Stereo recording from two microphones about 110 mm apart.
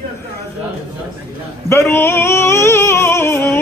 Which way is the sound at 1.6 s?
25° left (ahead or behind).